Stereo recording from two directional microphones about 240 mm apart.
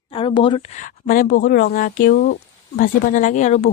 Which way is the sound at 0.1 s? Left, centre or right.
Left.